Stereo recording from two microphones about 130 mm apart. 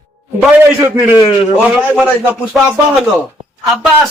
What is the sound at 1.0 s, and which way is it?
Speech, 15° right (ahead or behind).